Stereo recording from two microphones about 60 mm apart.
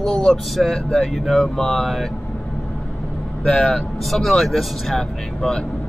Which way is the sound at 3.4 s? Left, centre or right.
Centre.